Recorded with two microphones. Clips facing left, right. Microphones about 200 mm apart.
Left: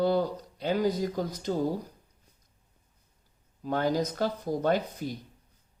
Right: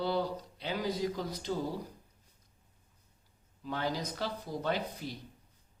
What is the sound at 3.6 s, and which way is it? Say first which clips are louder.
Speech: left 8 dB; 50° left (ahead or behind).